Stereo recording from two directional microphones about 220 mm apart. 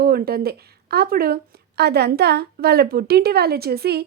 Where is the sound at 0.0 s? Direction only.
45° right (ahead or behind).